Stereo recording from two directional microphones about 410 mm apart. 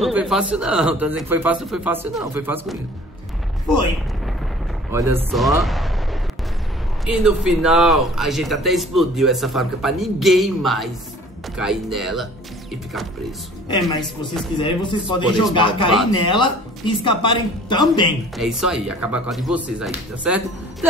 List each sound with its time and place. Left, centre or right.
0.0 s a man's voice: centre
4.9 s a man's voice: centre
7.1 s a man's voice: centre
14.6 s speech: centre
18.4 s a man's voice: centre